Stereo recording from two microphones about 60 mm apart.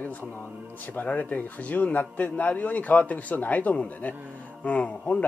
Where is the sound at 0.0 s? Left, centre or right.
Left.